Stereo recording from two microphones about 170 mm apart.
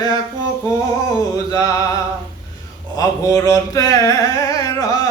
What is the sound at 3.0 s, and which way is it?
Mantra, 20° left (ahead or behind).